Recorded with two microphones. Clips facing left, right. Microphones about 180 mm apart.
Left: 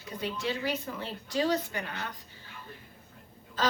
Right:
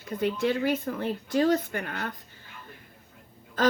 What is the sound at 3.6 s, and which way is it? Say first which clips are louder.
Speech: right 6 dB; 50° right (ahead or behind).